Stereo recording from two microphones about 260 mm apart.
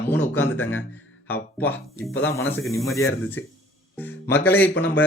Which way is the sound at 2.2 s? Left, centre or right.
Centre.